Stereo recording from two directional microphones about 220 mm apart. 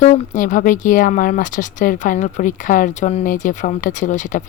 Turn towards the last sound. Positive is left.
turn(degrees=35)  # may be behind; listen again after turning